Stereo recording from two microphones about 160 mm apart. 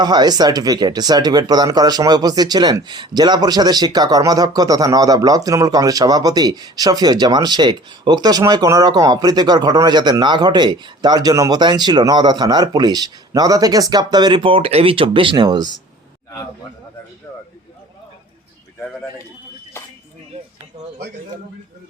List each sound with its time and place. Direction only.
0.0 s speech: 25° right (ahead or behind)